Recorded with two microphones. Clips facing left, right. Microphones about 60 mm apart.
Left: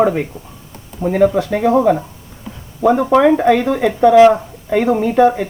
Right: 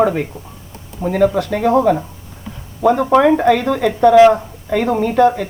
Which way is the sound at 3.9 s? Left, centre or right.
Centre.